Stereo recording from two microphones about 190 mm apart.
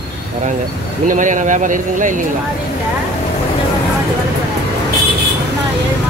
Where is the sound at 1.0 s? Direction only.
40° right (ahead or behind).